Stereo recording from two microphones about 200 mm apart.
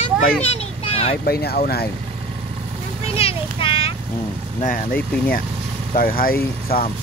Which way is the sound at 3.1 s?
30° left (ahead or behind).